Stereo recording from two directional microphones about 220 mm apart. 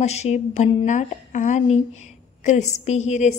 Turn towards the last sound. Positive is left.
turn(degrees=30)  # may be behind; listen again after turning